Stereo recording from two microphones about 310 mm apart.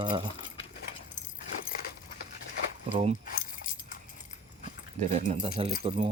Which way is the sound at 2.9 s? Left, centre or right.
Centre.